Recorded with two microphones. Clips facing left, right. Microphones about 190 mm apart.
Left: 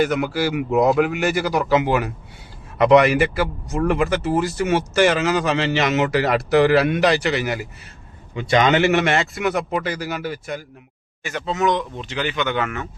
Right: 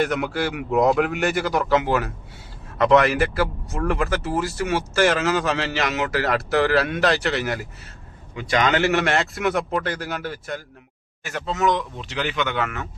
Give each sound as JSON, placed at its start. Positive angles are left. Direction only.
{"t": 0.0, "sound": "a man's voice", "side_deg": 0}
{"t": 3.2, "sound": "a man's voice", "side_deg": 0}
{"t": 3.8, "sound": "a man's voice", "side_deg": 15}
{"t": 4.8, "sound": "a man's voice", "side_deg": 0}
{"t": 6.1, "sound": "speech", "side_deg": 15}
{"t": 7.0, "sound": "a man's voice", "side_deg": 0}
{"t": 8.4, "sound": "a man's voice", "side_deg": 25}
{"t": 8.9, "sound": "a man's voice", "side_deg": 0}